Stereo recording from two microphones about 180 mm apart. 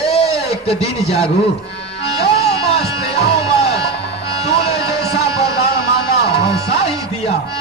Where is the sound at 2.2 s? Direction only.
35° left (ahead or behind).